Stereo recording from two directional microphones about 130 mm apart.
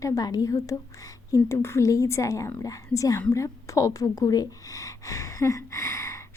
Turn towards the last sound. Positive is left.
turn(degrees=20)  # may be behind; listen again after turning